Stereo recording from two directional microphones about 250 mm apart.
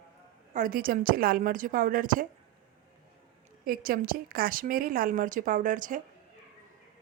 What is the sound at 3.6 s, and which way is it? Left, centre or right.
A woman's voice, right.